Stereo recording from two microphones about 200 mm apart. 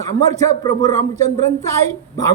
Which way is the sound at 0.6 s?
20° left (ahead or behind).